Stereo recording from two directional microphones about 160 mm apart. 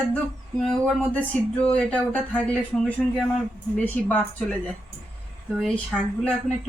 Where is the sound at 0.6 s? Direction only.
5° left (ahead or behind).